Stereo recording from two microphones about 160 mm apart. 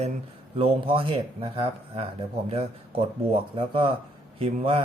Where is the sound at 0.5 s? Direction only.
35° right (ahead or behind).